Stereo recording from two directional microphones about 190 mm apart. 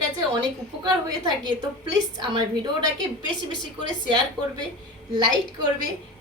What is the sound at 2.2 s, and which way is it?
Speech, 25° right (ahead or behind).